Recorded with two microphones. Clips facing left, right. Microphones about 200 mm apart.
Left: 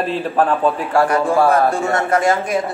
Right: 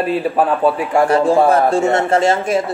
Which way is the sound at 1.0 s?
30° right (ahead or behind).